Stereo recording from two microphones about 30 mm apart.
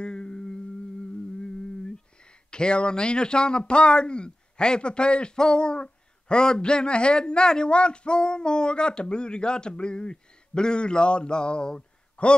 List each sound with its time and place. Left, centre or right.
0.0 s humming: left
2.5 s speech: left